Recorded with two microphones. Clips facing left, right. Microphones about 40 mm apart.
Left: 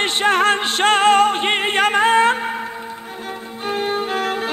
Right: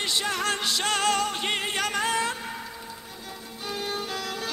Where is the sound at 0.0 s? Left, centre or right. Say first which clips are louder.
Left 11 dB; left.